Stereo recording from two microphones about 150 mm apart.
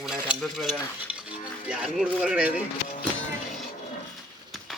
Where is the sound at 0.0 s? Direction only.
5° right (ahead or behind).